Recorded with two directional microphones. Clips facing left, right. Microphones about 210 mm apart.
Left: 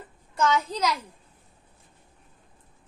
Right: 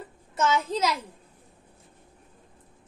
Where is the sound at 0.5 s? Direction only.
5° right (ahead or behind).